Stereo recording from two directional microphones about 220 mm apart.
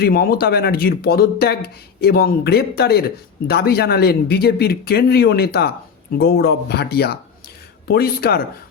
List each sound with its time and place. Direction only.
0.0 s speech: 45° left (ahead or behind)